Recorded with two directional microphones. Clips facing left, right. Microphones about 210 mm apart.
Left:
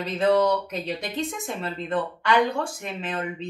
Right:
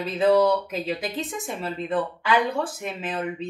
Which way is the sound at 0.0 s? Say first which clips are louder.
Right 2 dB; 5° right (ahead or behind).